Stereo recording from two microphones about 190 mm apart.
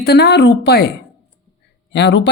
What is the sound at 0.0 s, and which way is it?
Speech, 60° left (ahead or behind).